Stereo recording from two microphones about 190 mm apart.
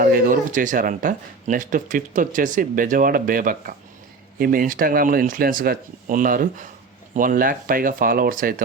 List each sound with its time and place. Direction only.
0.0 s speech: 50° right (ahead or behind)